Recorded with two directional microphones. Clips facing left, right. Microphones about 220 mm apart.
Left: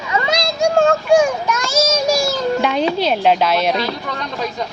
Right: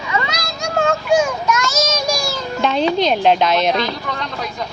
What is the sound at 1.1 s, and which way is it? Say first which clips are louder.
Children playing: left 2 dB; 15° left (ahead or behind).